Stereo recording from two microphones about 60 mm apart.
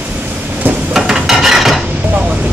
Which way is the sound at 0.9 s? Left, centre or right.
Centre.